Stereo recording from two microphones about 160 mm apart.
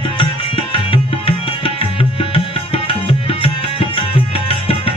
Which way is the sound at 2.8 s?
35° left (ahead or behind).